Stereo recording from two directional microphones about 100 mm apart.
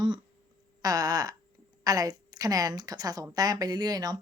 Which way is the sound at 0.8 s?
40° right (ahead or behind).